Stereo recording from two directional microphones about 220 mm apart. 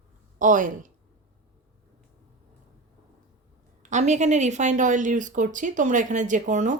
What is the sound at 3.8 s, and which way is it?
Speech, 30° right (ahead or behind).